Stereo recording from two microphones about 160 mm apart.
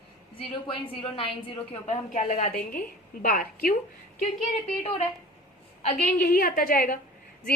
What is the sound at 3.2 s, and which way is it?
Speech, 60° left (ahead or behind).